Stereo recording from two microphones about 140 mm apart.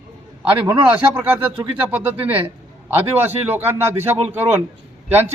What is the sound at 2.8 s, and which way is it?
A man's voice, 15° right (ahead or behind).